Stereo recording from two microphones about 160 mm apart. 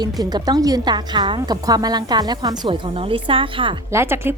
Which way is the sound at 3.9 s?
15° right (ahead or behind).